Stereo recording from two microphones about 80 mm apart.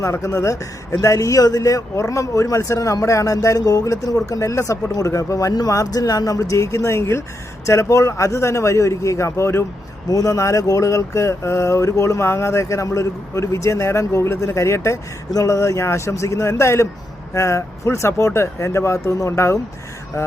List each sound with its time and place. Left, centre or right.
0.0 s speech: left
10.1 s speech: left